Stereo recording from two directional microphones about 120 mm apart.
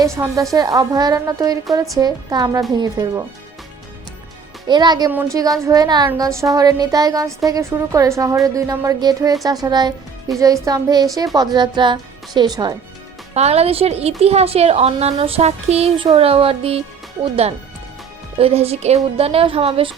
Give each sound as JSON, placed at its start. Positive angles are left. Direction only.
{"t": 0.0, "sound": "a woman's voice", "side_deg": -25}
{"t": 4.7, "sound": "a woman's voice", "side_deg": -35}
{"t": 13.3, "sound": "a woman's voice", "side_deg": -60}
{"t": 18.3, "sound": "a woman's voice", "side_deg": -55}